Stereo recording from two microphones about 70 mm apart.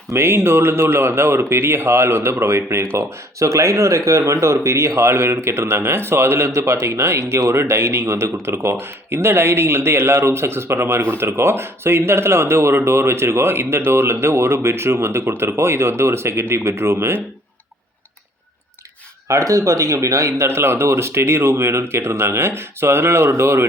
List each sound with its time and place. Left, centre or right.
0.1 s speech: right
3.3 s speech: right
19.3 s speech: right